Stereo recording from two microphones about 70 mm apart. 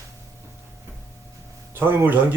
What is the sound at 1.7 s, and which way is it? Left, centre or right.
Speech, right.